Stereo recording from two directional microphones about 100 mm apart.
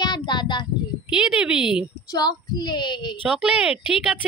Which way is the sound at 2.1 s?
40° left (ahead or behind).